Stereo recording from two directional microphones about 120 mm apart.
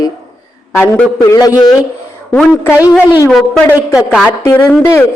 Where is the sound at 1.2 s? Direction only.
30° left (ahead or behind).